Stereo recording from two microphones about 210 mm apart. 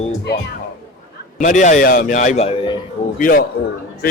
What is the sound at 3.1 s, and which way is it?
Speech, 40° left (ahead or behind).